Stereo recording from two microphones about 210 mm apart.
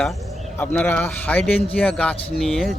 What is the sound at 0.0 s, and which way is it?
Speech, 5° left (ahead or behind).